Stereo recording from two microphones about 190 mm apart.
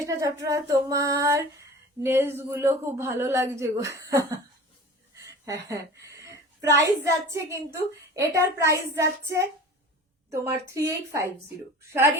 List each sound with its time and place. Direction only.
0.0 s a woman's voice: 15° right (ahead or behind)